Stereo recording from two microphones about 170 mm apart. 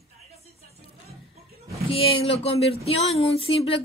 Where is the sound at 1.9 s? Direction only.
35° left (ahead or behind).